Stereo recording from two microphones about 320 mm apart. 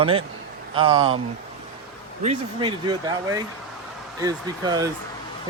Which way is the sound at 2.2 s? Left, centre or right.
Centre.